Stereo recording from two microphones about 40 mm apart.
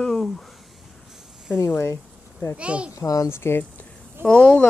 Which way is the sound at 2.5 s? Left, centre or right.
Right.